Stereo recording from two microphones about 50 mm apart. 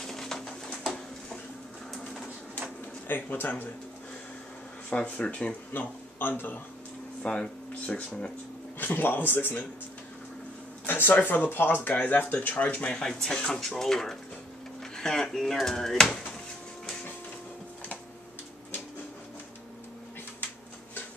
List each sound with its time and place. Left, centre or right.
0.0 s a sound: centre
3.1 s speech: left
4.8 s speech: left
5.7 s speech: left
7.2 s speech: left
8.7 s speech: left
10.9 s speech: left
12.4 s speech: left
12.9 s speech: centre